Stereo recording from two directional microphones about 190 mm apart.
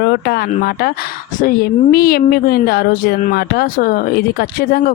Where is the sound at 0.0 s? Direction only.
55° left (ahead or behind).